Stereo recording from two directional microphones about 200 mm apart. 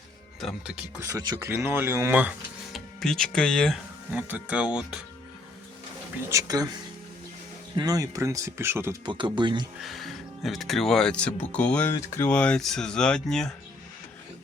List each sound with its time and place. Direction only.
0.3 s speech: centre (ahead or behind)
1.0 s speech: 20° right (ahead or behind)
2.7 s speech: centre (ahead or behind)
6.2 s speech: 15° right (ahead or behind)
7.8 s speech: 15° right (ahead or behind)
9.8 s speech: centre (ahead or behind)